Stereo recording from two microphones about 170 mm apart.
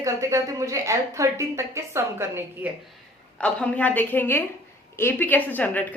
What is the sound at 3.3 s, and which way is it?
A woman's voice, 5° left (ahead or behind).